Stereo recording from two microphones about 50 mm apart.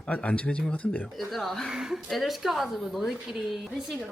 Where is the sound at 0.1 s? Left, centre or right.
Left.